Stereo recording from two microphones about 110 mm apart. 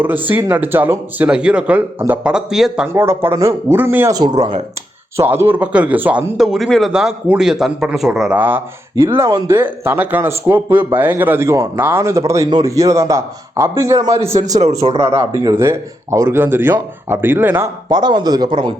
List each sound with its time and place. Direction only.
0.0 s a man's voice: 15° right (ahead or behind)
2.8 s a man's voice: 20° right (ahead or behind)
4.1 s speech: 40° right (ahead or behind)
5.1 s a man's voice: 20° right (ahead or behind); by 8.4 s 5° right (ahead or behind)
8.4 s a man's voice: 15° right (ahead or behind)
14.6 s speech: 90° right
14.9 s a man's voice: 25° right (ahead or behind)
17.8 s speech: 40° right (ahead or behind)